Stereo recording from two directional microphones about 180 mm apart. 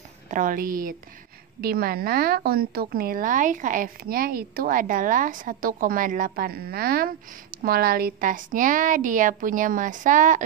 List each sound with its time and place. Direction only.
0.3 s a woman's voice: 50° right (ahead or behind)